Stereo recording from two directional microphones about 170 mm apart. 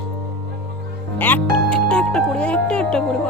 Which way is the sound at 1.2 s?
10° left (ahead or behind).